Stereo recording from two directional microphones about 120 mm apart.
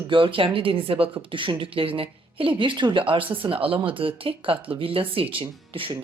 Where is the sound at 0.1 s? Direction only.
45° right (ahead or behind).